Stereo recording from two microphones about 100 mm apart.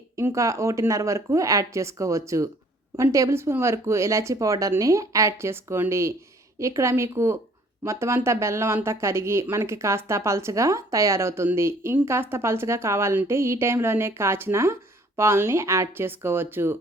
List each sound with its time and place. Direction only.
0.2 s speech: 30° right (ahead or behind)